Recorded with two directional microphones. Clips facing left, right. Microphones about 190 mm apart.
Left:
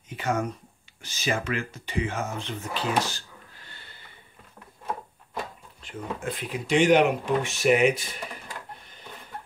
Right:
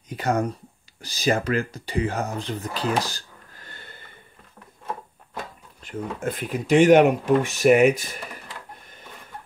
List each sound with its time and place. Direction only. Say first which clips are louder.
0.1 s speech: right 4 dB; 35° right (ahead or behind)
5.8 s speech: right 4 dB; 45° right (ahead or behind)